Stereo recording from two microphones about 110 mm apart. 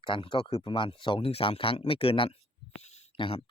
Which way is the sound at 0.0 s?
50° left (ahead or behind).